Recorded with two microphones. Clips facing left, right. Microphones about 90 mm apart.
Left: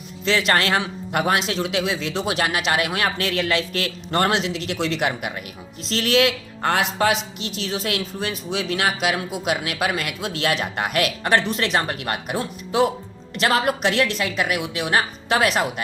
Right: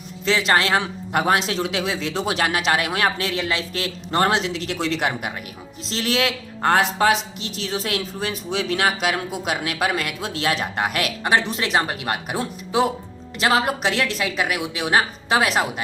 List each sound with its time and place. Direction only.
0.3 s speech: 25° right (ahead or behind)
4.3 s speech: 40° right (ahead or behind)